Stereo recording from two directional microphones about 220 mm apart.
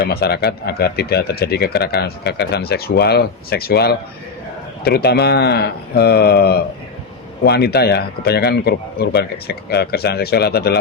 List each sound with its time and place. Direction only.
0.0 s speech: 45° left (ahead or behind)